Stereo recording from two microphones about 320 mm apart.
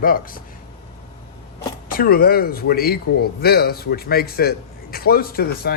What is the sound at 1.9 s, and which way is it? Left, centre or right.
A man's voice, left.